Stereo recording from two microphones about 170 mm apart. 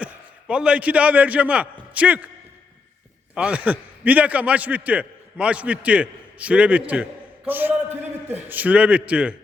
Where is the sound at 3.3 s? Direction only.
5° right (ahead or behind).